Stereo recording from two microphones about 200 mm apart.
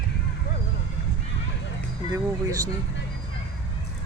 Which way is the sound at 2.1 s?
15° right (ahead or behind).